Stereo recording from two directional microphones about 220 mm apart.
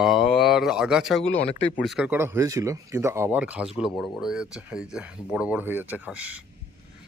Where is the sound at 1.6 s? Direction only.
25° left (ahead or behind).